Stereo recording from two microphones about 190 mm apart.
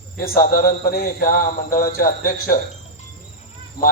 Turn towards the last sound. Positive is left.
turn(degrees=50)  # may be behind; listen again after turning